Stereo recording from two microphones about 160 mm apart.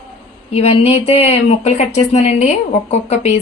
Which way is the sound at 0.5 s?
40° left (ahead or behind).